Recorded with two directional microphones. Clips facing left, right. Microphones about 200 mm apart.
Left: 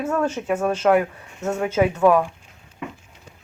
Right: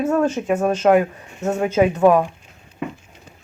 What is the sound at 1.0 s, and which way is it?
Speech, 25° right (ahead or behind).